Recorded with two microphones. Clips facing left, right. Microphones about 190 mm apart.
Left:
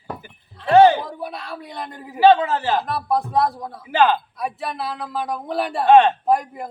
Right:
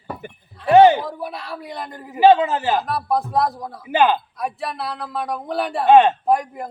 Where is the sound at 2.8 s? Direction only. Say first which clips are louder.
Even; centre (ahead or behind).